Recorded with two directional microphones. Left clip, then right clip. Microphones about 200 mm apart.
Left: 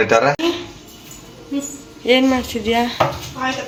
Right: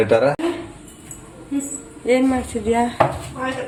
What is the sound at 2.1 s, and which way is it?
Speech, 5° left (ahead or behind).